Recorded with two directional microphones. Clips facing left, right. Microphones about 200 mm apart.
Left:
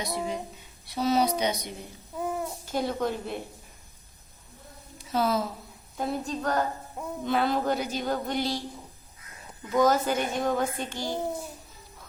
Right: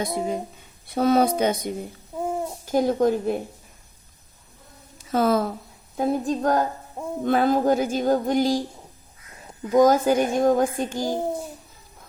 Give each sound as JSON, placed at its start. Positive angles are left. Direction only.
{"t": 0.0, "sound": "speech", "side_deg": -45}
{"t": 2.1, "sound": "babbling", "side_deg": -25}
{"t": 2.7, "sound": "speech", "side_deg": -45}
{"t": 5.1, "sound": "speech", "side_deg": -50}
{"t": 9.6, "sound": "speech", "side_deg": -45}